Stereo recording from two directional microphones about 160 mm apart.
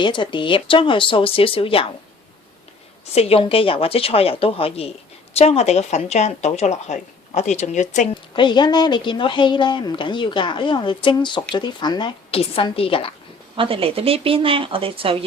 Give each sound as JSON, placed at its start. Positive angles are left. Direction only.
{"t": 0.0, "sound": "speech", "side_deg": 30}
{"t": 3.2, "sound": "speech", "side_deg": 35}
{"t": 8.3, "sound": "speech", "side_deg": 30}
{"t": 13.6, "sound": "speech", "side_deg": -35}